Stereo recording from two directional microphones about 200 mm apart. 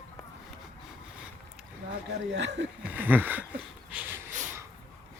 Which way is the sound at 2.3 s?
60° right (ahead or behind).